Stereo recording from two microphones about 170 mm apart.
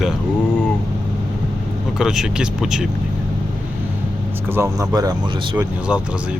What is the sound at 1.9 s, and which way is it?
Speech, 5° right (ahead or behind).